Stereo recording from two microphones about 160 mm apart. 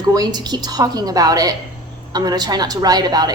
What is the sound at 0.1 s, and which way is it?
A woman's voice, 25° right (ahead or behind).